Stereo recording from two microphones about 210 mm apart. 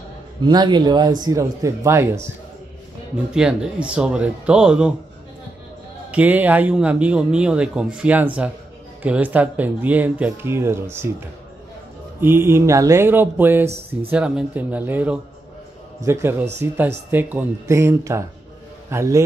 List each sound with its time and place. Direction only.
0.4 s speech: 20° right (ahead or behind)
3.3 s a man's voice: 5° right (ahead or behind)
6.1 s a man's voice: 10° right (ahead or behind)